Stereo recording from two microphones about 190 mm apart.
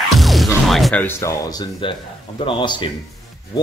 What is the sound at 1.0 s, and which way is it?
Speech, 15° left (ahead or behind).